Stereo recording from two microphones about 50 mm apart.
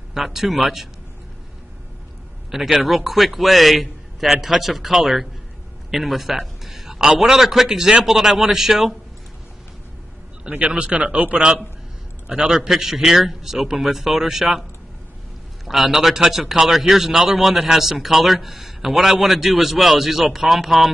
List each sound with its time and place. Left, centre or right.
0.1 s a man's voice: centre
2.5 s a man's voice: centre
10.7 s speech: right
12.4 s a man's voice: centre
15.6 s a man's voice: centre